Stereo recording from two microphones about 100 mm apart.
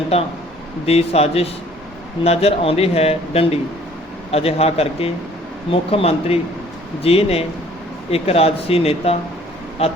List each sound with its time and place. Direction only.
0.1 s speech: 90° left
5.7 s speech: 75° left (ahead or behind); by 9.9 s 90° left